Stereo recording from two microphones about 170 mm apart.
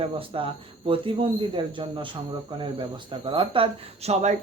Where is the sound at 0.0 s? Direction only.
30° right (ahead or behind).